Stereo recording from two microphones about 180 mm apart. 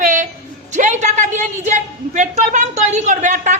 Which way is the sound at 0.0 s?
45° right (ahead or behind).